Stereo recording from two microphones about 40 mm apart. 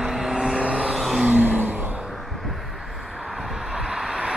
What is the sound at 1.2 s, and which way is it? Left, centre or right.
Vehicle, right.